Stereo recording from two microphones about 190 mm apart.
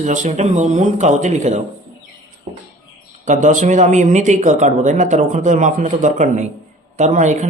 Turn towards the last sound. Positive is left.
turn(degrees=-40)  # may be behind; listen again after turning